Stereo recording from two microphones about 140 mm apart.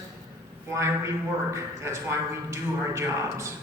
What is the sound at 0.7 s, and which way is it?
A woman's voice, 20° right (ahead or behind).